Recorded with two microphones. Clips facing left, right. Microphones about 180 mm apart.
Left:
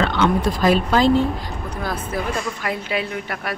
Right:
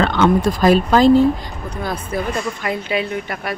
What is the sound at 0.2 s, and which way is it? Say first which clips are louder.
Speech: right 4 dB; 45° right (ahead or behind).